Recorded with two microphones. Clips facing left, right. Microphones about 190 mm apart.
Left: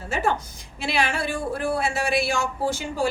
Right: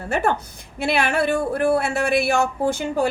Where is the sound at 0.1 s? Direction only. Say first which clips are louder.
Right 3 dB; 60° right (ahead or behind).